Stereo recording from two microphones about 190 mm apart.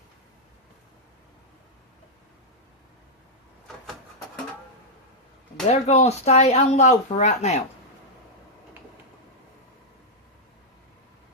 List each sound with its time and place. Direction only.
5.6 s speech: 35° left (ahead or behind)